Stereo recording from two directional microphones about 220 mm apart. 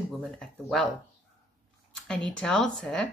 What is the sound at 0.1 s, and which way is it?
Speech, centre (ahead or behind).